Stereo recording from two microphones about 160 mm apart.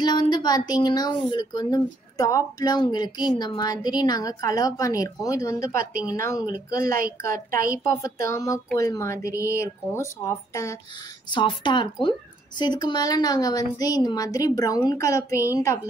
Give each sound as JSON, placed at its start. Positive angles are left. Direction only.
{"t": 0.0, "sound": "speech", "side_deg": 25}
{"t": 6.5, "sound": "a woman's voice", "side_deg": -70}
{"t": 7.9, "sound": "speech", "side_deg": 20}
{"t": 11.2, "sound": "speech", "side_deg": 30}